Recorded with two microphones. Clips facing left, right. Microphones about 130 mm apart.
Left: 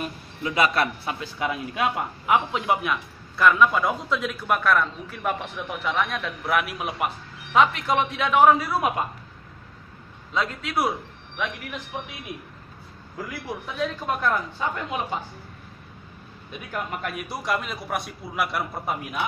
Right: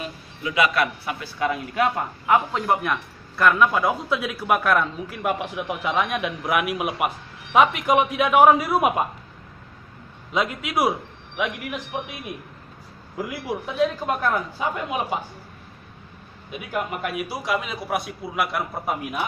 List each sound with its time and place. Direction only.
0.4 s a man's voice: 35° left (ahead or behind)
1.2 s a man's voice: 20° left (ahead or behind); by 9.0 s 20° right (ahead or behind)
10.3 s a man's voice: 15° right (ahead or behind)
13.2 s a man's voice: 15° right (ahead or behind)
16.5 s a man's voice: 5° right (ahead or behind)